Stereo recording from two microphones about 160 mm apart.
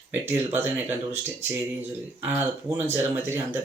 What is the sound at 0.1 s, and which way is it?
Speech, 15° right (ahead or behind).